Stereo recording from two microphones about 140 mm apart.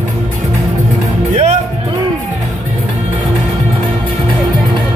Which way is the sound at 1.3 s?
50° right (ahead or behind).